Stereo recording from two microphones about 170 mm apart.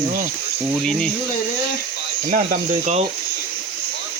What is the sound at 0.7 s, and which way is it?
Speech, 5° left (ahead or behind).